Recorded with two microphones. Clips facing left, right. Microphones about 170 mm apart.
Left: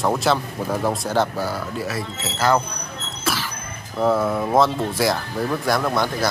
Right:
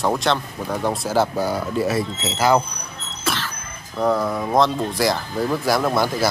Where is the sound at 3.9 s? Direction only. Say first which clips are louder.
Left 1 dB; 5° left (ahead or behind).